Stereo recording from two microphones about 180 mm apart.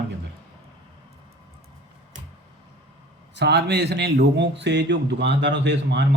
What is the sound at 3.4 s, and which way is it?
A man's voice, 70° right (ahead or behind).